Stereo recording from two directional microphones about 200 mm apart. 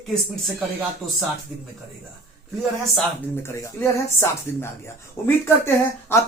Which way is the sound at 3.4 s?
10° left (ahead or behind).